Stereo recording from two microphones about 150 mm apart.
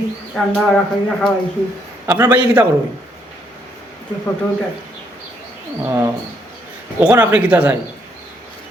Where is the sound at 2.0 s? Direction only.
15° right (ahead or behind).